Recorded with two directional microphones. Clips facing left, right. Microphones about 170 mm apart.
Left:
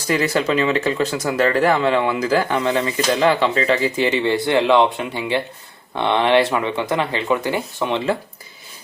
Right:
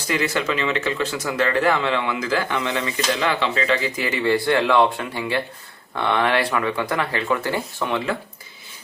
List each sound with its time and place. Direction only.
0.1 s speech: 35° left (ahead or behind)